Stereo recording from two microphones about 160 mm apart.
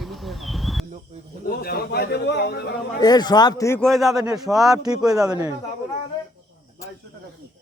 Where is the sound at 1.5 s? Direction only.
75° left (ahead or behind); by 2.7 s 90° left.